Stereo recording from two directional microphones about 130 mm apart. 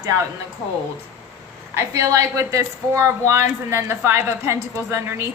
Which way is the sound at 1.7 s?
25° right (ahead or behind).